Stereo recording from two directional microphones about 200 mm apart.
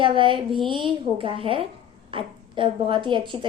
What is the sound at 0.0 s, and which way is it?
A woman's voice, 25° right (ahead or behind).